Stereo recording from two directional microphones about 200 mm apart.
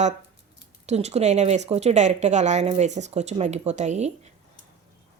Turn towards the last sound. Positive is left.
turn(degrees=-35)  # may be behind; listen again after turning